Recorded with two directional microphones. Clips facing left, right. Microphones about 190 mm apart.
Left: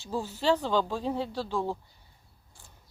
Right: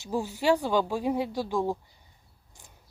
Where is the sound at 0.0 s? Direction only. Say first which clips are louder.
Right 2 dB; 15° right (ahead or behind).